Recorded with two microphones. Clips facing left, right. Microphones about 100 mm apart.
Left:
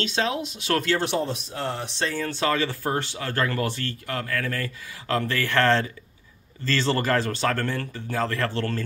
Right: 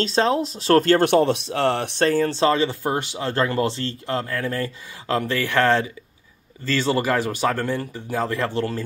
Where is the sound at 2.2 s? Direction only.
25° right (ahead or behind).